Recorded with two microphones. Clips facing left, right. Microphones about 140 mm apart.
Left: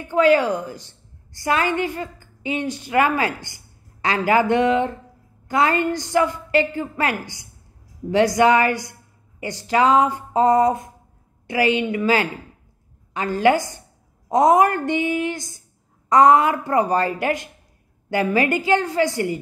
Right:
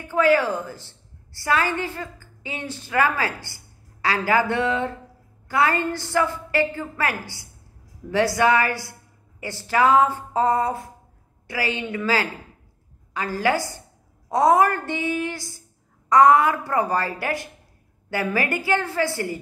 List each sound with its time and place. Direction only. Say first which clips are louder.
0.0 s a woman's voice: left 3 dB; 20° left (ahead or behind)